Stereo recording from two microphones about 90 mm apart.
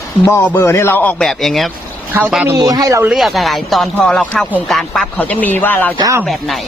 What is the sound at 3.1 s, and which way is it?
A man's voice, centre (ahead or behind).